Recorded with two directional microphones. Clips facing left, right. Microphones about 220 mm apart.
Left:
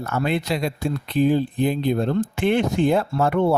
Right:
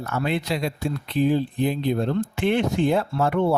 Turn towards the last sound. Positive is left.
turn(degrees=50)  # may be behind; listen again after turning